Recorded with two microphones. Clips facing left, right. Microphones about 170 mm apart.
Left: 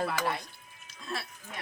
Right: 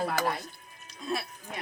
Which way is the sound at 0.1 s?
40° right (ahead or behind).